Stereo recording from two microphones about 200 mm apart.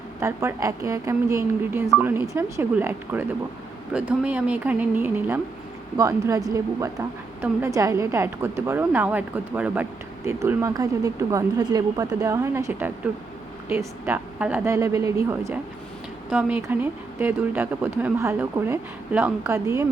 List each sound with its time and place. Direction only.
0.2 s speech: 15° right (ahead or behind)